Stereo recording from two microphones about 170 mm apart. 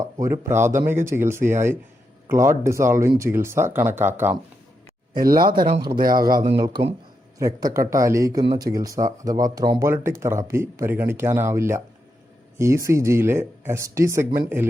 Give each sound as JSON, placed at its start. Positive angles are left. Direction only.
{"t": 0.0, "sound": "speech", "side_deg": -15}
{"t": 5.1, "sound": "speech", "side_deg": -60}
{"t": 7.3, "sound": "speech", "side_deg": -20}